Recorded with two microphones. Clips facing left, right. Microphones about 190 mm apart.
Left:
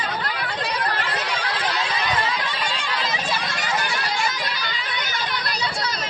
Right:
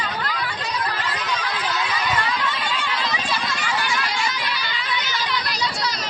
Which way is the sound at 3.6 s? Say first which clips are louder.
Right 1 dB; 40° left (ahead or behind).